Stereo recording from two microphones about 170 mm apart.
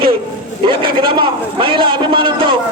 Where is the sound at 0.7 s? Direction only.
30° right (ahead or behind).